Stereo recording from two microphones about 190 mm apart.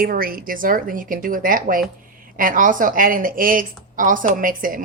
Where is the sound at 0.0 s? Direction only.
50° right (ahead or behind).